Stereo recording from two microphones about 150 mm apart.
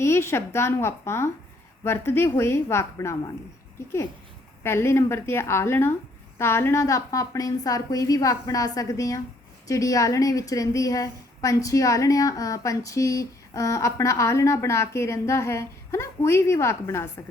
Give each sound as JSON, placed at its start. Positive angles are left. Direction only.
{"t": 0.0, "sound": "a woman's voice", "side_deg": 15}
{"t": 4.6, "sound": "a woman's voice", "side_deg": 15}